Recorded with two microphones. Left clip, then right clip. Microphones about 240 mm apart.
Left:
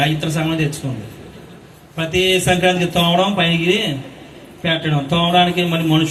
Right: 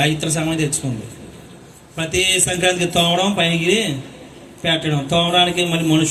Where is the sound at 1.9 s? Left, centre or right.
Right.